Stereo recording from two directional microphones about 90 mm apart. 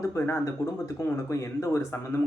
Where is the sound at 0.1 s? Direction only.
30° left (ahead or behind).